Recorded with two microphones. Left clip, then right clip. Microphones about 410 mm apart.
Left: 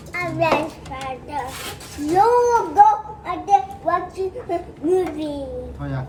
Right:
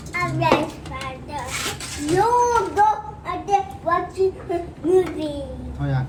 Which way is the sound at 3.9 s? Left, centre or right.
Left.